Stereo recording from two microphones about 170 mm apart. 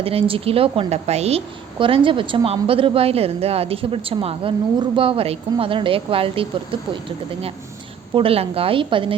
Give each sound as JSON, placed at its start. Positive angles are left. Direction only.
{"t": 0.0, "sound": "a woman's voice", "side_deg": -35}
{"t": 8.1, "sound": "a woman's voice", "side_deg": -35}